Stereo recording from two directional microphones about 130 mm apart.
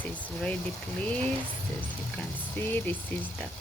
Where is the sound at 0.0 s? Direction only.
10° left (ahead or behind).